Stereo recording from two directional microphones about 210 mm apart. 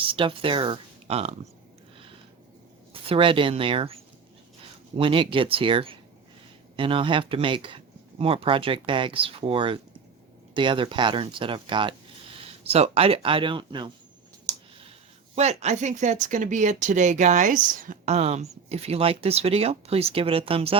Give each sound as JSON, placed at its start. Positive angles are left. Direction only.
{"t": 0.0, "sound": "speech", "side_deg": -25}
{"t": 2.9, "sound": "speech", "side_deg": -25}
{"t": 14.5, "sound": "a sound", "side_deg": -20}
{"t": 15.4, "sound": "speech", "side_deg": -30}